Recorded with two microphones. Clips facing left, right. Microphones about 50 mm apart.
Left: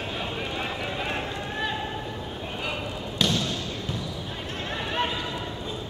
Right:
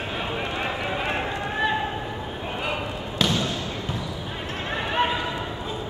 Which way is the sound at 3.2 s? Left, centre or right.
Centre.